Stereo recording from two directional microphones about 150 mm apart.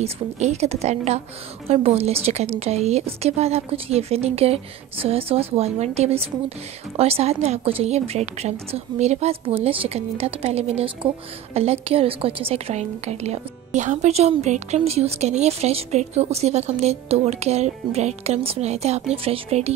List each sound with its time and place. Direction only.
0.0 s a woman's voice: 45° right (ahead or behind)